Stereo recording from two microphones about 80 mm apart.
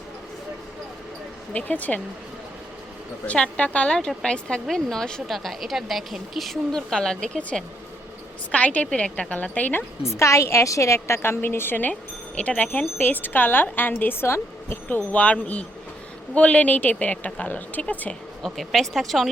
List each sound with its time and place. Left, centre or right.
1.5 s a woman's voice: centre
3.2 s a woman's voice: centre
10.0 s a woman's voice: left; by 18.2 s centre
18.4 s a woman's voice: centre